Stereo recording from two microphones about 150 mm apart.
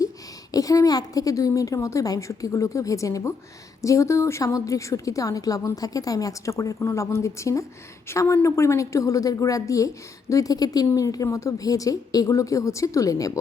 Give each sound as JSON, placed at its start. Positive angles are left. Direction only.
{"t": 0.5, "sound": "a woman's voice", "side_deg": 25}